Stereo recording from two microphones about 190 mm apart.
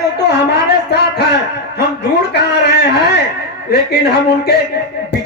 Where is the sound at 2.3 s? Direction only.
60° left (ahead or behind).